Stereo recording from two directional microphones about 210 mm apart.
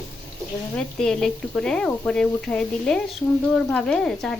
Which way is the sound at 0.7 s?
5° left (ahead or behind).